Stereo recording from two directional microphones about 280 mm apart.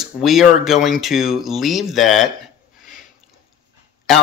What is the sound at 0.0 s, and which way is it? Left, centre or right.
Speech, centre.